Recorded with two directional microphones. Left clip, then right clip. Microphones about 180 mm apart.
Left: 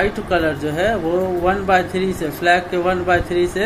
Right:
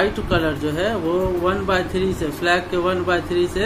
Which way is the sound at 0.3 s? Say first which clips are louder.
Left 2 dB; 10° left (ahead or behind).